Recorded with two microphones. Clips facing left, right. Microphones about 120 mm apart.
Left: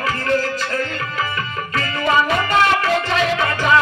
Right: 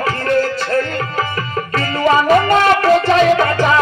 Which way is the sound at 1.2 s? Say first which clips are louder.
Right 3 dB; 35° right (ahead or behind).